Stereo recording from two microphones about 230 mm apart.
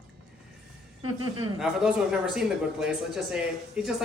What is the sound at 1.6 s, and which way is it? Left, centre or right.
Speech, centre.